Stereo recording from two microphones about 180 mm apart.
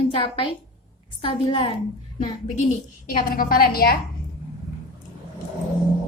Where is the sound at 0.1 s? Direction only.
30° left (ahead or behind).